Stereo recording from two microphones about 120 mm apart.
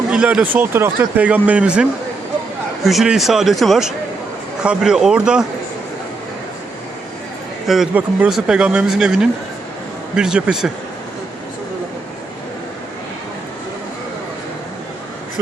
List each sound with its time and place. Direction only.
0.1 s speech: 10° right (ahead or behind)
7.9 s speech: 10° right (ahead or behind)